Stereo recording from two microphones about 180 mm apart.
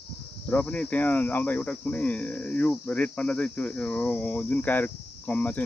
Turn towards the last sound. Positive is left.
turn(degrees=10)  # may be behind; listen again after turning